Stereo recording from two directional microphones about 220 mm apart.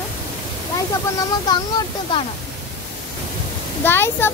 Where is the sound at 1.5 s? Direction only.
20° left (ahead or behind).